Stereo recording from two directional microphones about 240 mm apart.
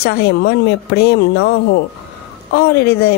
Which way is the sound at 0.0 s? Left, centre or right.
Left.